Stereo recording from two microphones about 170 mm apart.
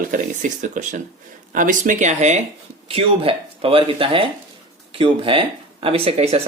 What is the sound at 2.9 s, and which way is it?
Speech, 35° right (ahead or behind).